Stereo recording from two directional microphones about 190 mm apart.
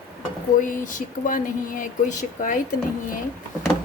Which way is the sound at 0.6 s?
45° left (ahead or behind).